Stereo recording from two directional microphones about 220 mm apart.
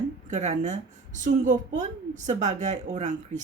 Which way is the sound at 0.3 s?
35° right (ahead or behind).